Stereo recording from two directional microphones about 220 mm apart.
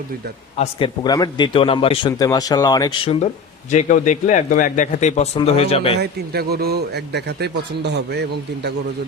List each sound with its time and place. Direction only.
0.6 s a man's voice: 20° left (ahead or behind)
6.0 s a man's voice: 45° right (ahead or behind)